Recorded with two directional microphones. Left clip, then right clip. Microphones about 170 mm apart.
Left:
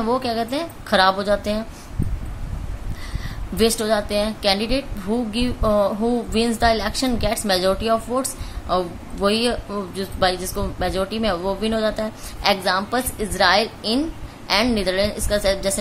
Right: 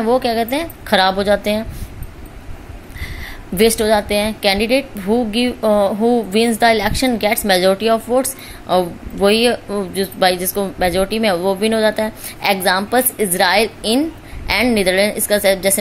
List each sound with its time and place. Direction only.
0.0 s a woman's voice: 20° right (ahead or behind)
3.5 s a woman's voice: 20° right (ahead or behind)